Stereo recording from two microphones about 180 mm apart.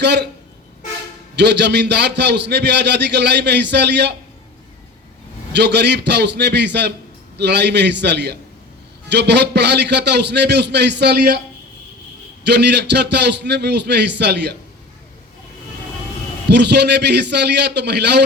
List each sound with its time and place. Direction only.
0.0 s a man's voice: 70° right (ahead or behind)
1.4 s a man's voice: 70° right (ahead or behind)
5.5 s a man's voice: 70° right (ahead or behind)
12.5 s a man's voice: 70° right (ahead or behind)
16.5 s a man's voice: 70° right (ahead or behind)